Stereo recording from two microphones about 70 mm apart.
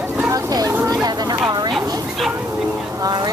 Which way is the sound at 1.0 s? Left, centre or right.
Right.